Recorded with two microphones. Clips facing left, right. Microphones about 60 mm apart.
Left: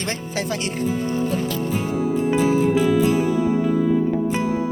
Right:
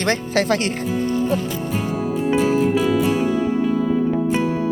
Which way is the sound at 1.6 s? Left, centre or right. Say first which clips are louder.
Left 1 dB; right.